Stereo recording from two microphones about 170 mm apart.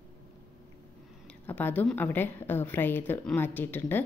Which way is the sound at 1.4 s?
10° left (ahead or behind).